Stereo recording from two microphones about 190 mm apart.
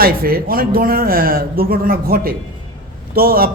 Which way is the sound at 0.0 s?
50° right (ahead or behind).